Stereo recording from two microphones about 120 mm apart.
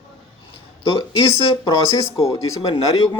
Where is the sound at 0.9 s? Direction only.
30° left (ahead or behind).